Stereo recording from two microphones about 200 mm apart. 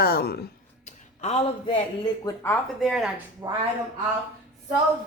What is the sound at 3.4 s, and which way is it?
Speech, 15° right (ahead or behind).